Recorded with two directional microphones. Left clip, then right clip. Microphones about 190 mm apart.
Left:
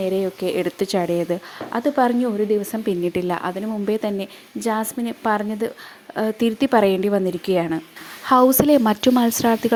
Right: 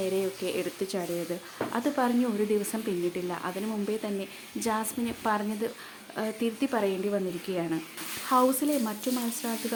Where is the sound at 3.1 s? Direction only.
40° left (ahead or behind).